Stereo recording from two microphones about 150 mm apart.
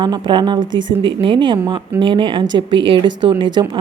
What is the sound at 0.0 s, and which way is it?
A woman's voice, 30° right (ahead or behind).